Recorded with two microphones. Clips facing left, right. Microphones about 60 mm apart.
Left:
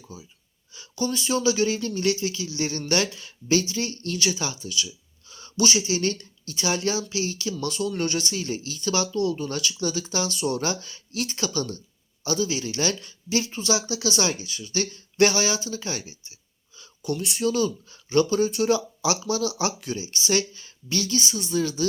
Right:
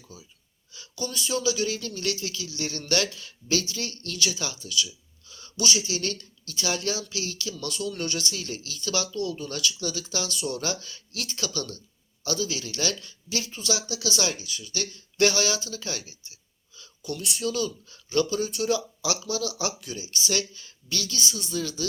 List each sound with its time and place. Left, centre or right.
0.7 s speech: left